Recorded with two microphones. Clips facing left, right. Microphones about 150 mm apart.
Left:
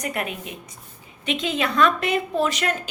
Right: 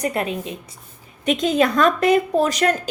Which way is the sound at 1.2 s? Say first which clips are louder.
Right 7 dB; 40° right (ahead or behind).